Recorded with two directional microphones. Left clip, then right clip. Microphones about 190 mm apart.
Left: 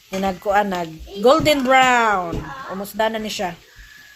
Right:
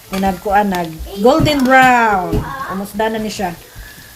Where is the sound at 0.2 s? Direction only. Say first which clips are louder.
Right 4 dB; 35° left (ahead or behind).